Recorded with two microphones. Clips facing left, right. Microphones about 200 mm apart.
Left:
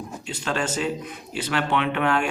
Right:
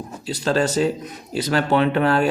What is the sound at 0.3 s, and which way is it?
Speech, 35° right (ahead or behind).